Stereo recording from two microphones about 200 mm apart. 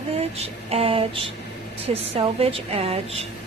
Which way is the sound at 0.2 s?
30° right (ahead or behind).